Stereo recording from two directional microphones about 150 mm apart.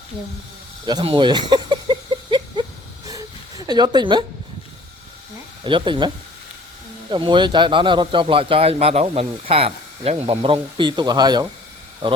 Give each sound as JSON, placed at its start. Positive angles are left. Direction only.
{"t": 0.9, "sound": "a sound", "side_deg": -30}
{"t": 5.6, "sound": "a man's voice", "side_deg": -30}
{"t": 7.1, "sound": "a man's voice", "side_deg": -30}